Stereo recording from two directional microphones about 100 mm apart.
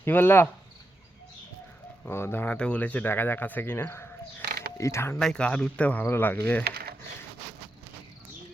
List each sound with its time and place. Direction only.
0.0 s speech: 20° left (ahead or behind)
2.0 s speech: 25° left (ahead or behind)
5.2 s speech: 10° left (ahead or behind)